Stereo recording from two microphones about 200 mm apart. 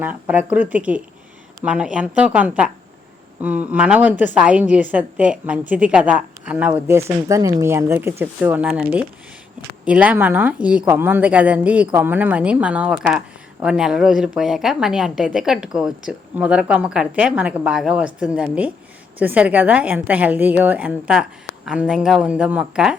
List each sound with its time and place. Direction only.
0.0 s a woman's voice: 10° right (ahead or behind)